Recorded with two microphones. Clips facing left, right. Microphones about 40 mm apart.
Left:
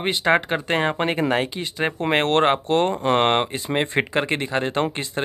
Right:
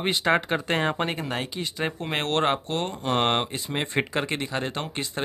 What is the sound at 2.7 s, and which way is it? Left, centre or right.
Speech, left.